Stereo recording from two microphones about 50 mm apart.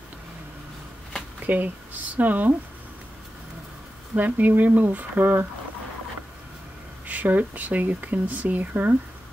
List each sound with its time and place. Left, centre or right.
1.4 s speech: right
4.1 s speech: right
7.1 s speech: right